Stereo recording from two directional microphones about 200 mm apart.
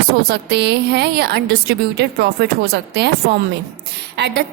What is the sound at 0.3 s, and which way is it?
A woman's voice, 55° right (ahead or behind).